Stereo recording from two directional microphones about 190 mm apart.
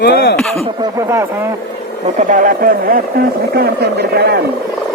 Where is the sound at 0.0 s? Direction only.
55° left (ahead or behind).